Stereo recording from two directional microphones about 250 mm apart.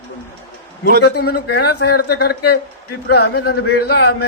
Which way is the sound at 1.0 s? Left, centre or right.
Left.